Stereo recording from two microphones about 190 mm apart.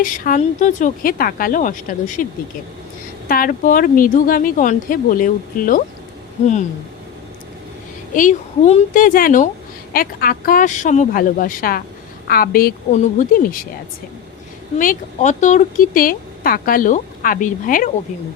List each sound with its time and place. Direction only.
0.0 s speech: 45° left (ahead or behind)
3.2 s speech: 50° left (ahead or behind)
8.1 s speech: 45° left (ahead or behind)
12.9 s speech: 40° left (ahead or behind)
14.8 s speech: 40° left (ahead or behind)